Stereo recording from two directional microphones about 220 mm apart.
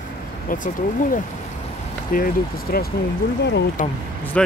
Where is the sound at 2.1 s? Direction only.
40° left (ahead or behind).